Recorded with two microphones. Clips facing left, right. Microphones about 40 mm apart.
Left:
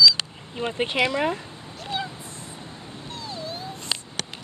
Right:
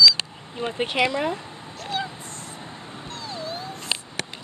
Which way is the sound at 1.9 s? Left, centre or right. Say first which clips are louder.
Right 1 dB; centre.